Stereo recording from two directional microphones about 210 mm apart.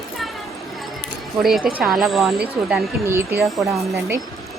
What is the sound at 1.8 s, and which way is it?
A woman's voice, centre (ahead or behind).